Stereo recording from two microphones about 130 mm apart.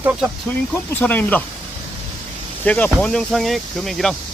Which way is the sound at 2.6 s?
10° left (ahead or behind).